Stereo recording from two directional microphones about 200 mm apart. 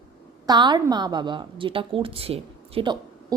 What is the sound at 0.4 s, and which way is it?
A woman's voice, 20° right (ahead or behind).